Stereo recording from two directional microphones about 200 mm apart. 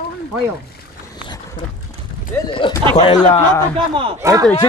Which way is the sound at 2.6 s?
25° left (ahead or behind).